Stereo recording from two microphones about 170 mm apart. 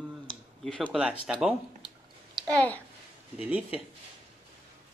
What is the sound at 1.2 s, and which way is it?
Speech, 5° right (ahead or behind).